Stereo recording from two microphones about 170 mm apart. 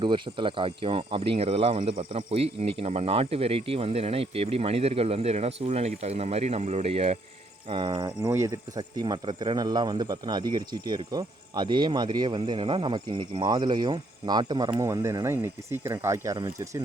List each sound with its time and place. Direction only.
0.0 s speech: 30° right (ahead or behind)